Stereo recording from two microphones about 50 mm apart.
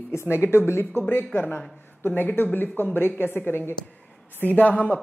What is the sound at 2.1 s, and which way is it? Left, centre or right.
Speech, left.